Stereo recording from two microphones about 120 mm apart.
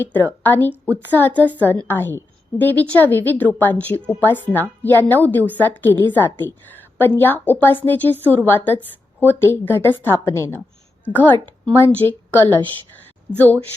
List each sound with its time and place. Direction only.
0.0 s a woman's voice: 15° left (ahead or behind)